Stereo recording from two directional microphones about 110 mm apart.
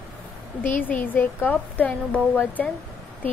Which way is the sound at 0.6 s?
15° left (ahead or behind).